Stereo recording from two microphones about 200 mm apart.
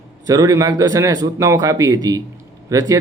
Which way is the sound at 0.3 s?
20° right (ahead or behind).